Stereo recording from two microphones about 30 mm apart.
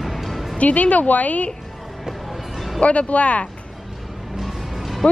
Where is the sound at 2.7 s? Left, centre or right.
Left.